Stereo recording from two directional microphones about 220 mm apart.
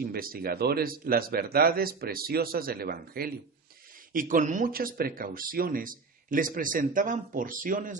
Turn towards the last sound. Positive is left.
turn(degrees=-35)  # may be behind; listen again after turning